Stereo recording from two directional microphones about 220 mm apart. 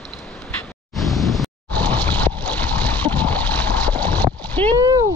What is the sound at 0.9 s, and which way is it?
Boat, centre (ahead or behind).